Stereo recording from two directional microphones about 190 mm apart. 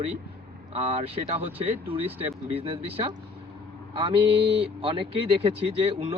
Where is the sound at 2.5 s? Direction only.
30° right (ahead or behind).